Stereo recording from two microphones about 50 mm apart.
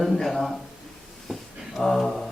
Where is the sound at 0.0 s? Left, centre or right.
Centre.